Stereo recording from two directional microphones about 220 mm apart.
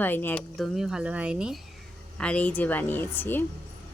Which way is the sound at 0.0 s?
10° left (ahead or behind).